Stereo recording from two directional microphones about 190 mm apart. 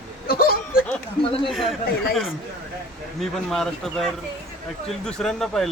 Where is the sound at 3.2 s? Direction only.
Centre (ahead or behind).